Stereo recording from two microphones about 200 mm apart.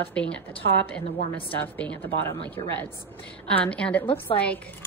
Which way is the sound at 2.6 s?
25° left (ahead or behind).